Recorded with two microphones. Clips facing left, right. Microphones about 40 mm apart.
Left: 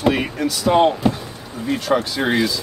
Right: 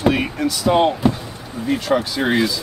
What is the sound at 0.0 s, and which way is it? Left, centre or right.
Speech, centre.